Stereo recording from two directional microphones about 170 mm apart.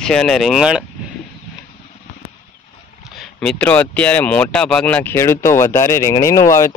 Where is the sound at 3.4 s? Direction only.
10° left (ahead or behind).